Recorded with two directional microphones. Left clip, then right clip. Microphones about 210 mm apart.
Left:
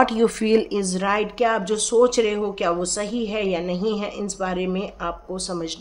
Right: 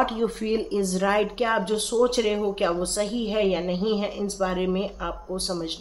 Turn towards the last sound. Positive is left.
turn(degrees=20)  # may be behind; listen again after turning